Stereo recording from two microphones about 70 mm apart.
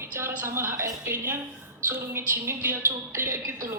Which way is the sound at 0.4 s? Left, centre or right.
Right.